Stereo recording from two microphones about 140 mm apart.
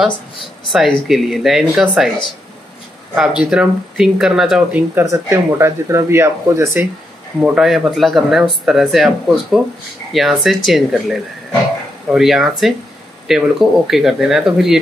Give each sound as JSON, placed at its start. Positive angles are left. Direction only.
{"t": 0.7, "sound": "speech", "side_deg": 0}
{"t": 3.2, "sound": "speech", "side_deg": -5}
{"t": 5.0, "sound": "speech", "side_deg": -20}
{"t": 7.4, "sound": "speech", "side_deg": -5}